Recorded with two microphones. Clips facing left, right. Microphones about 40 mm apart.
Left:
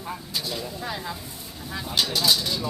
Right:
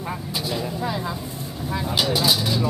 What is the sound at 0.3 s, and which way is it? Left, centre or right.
Vehicle, centre.